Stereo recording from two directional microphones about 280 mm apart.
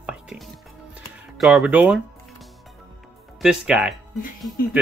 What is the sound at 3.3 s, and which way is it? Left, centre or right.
Speech, centre.